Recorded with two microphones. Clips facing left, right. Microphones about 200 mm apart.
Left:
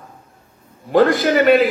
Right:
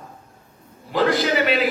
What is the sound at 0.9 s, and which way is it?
Speech, 50° left (ahead or behind).